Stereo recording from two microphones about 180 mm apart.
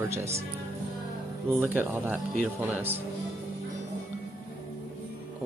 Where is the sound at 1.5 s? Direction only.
10° right (ahead or behind).